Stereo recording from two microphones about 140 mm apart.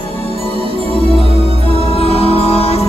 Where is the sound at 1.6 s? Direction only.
45° left (ahead or behind).